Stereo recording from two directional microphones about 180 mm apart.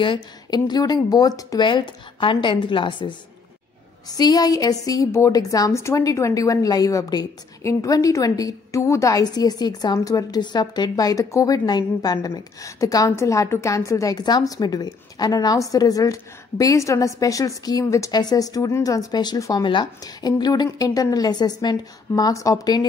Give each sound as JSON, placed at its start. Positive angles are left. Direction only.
{"t": 0.0, "sound": "a woman's voice", "side_deg": 25}